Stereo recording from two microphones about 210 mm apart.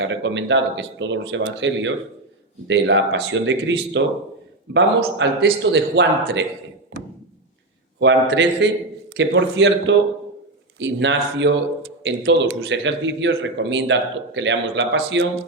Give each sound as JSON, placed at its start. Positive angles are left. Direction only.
{"t": 0.0, "sound": "a man's voice", "side_deg": -60}
{"t": 7.9, "sound": "a man's voice", "side_deg": -60}